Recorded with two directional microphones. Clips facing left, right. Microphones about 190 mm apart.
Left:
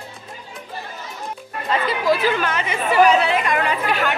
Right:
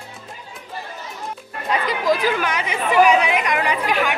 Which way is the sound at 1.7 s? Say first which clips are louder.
Even; 15° right (ahead or behind).